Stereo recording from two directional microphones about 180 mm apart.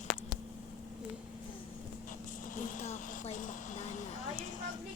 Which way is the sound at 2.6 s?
40° left (ahead or behind).